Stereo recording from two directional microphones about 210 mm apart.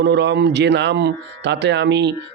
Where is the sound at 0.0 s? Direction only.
55° right (ahead or behind).